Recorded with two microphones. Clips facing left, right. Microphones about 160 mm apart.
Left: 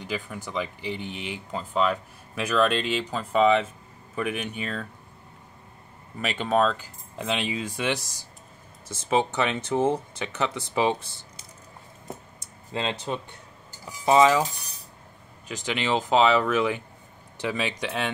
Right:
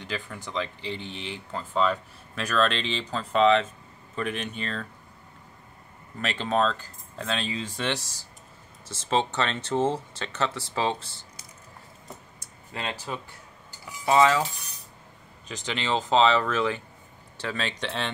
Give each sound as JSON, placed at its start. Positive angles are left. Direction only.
{"t": 0.0, "sound": "speech", "side_deg": 10}
{"t": 6.2, "sound": "speech", "side_deg": 10}
{"t": 12.4, "sound": "computer keyboard", "side_deg": 25}
{"t": 13.0, "sound": "speech", "side_deg": 25}